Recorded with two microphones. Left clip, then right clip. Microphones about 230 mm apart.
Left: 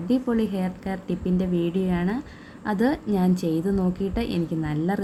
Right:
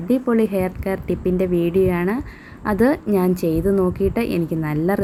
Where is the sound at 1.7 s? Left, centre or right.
Centre.